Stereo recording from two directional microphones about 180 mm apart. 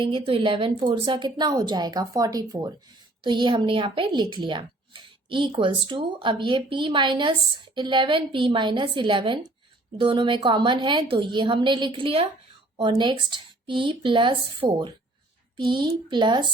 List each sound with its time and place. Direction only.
0.0 s speech: 25° right (ahead or behind)